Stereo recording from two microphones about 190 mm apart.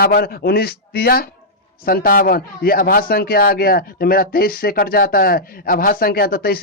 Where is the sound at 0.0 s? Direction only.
55° left (ahead or behind).